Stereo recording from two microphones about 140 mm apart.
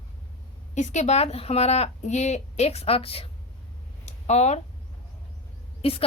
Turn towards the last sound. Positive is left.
turn(degrees=45)  # may be behind; listen again after turning